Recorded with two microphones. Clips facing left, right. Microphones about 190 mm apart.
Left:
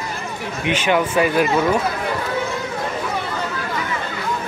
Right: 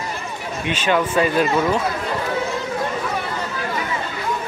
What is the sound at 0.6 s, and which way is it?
Speech, 15° left (ahead or behind).